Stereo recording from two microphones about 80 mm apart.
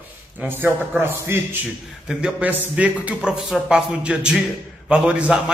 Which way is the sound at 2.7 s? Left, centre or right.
Centre.